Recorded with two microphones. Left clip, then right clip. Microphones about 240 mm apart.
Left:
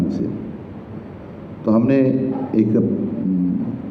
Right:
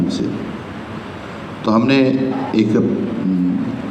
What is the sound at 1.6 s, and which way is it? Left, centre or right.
A man's voice, right.